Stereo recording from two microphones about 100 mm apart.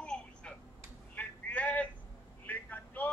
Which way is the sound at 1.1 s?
15° left (ahead or behind).